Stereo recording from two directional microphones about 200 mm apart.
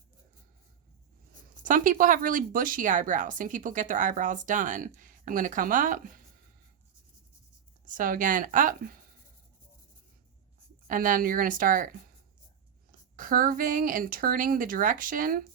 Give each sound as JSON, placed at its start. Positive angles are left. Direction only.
{"t": 1.6, "sound": "speech", "side_deg": -40}
{"t": 7.9, "sound": "speech", "side_deg": -45}
{"t": 10.8, "sound": "speech", "side_deg": -40}
{"t": 13.1, "sound": "speech", "side_deg": -45}